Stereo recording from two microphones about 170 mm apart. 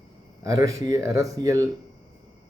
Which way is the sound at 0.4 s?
20° right (ahead or behind).